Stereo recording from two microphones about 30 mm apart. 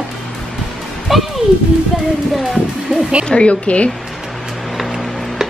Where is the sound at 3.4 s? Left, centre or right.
Left.